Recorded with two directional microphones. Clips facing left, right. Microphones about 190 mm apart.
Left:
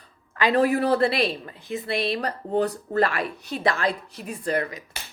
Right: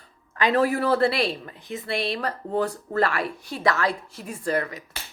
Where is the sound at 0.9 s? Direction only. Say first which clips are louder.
Even; 20° left (ahead or behind).